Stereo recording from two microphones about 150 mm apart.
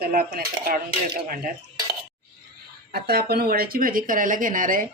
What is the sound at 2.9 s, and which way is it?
Speech, 90° right.